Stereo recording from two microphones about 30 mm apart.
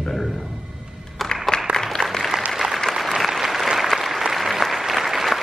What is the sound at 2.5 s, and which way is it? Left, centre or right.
Applause, centre.